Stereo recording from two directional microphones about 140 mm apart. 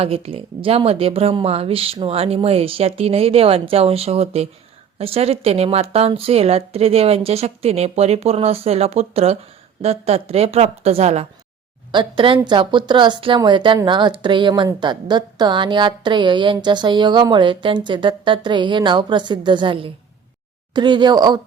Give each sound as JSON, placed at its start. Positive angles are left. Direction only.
{"t": 0.0, "sound": "speech", "side_deg": -45}
{"t": 11.9, "sound": "a woman's voice", "side_deg": -35}